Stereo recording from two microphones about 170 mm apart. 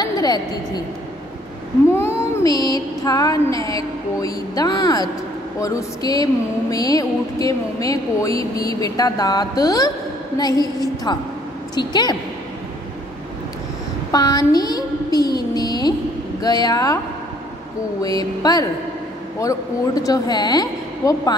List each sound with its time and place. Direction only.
0.0 s a woman's voice: 25° left (ahead or behind)
1.9 s a woman's voice: 15° left (ahead or behind)
14.1 s a woman's voice: 25° left (ahead or behind)
18.0 s a woman's voice: 20° left (ahead or behind)